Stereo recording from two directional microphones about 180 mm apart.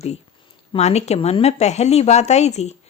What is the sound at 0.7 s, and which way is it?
A woman's voice, 35° left (ahead or behind).